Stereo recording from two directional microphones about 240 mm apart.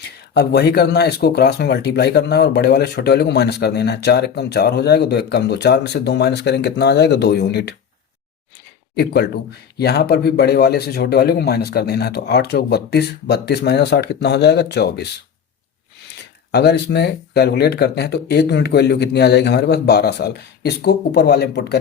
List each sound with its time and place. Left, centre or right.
0.0 s speech: left
9.7 s speech: left